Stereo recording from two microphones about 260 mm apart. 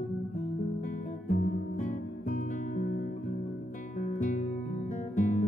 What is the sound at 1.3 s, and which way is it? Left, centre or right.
Music, left.